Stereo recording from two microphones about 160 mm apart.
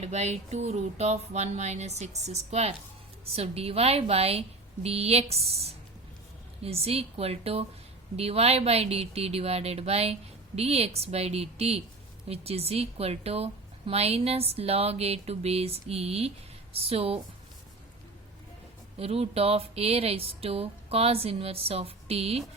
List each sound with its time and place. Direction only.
0.0 s music: 45° right (ahead or behind)
3.3 s a woman's voice: 40° right (ahead or behind)
18.9 s a woman's voice: 40° right (ahead or behind)